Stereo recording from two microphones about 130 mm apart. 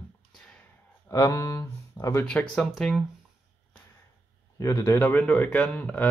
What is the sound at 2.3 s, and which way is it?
Speech, 5° left (ahead or behind).